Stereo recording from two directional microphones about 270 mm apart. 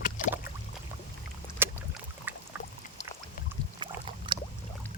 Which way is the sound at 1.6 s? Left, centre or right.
Centre.